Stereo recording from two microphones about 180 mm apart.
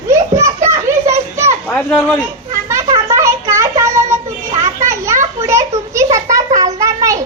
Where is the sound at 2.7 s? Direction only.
15° right (ahead or behind).